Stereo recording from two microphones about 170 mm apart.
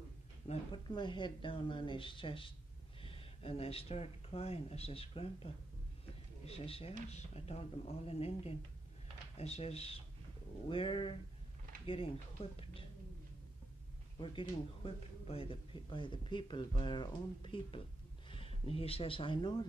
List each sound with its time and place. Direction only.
0.5 s speech: 40° left (ahead or behind)
0.8 s speech: 25° left (ahead or behind)
14.1 s speech: 30° left (ahead or behind)